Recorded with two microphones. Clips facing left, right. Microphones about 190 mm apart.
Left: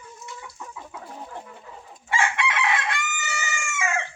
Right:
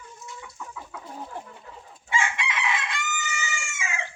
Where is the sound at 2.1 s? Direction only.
60° left (ahead or behind).